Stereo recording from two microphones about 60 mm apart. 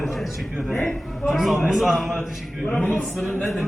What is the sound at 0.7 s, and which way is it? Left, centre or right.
Speech, left.